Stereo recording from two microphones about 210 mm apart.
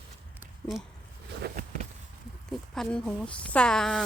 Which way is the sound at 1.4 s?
40° right (ahead or behind).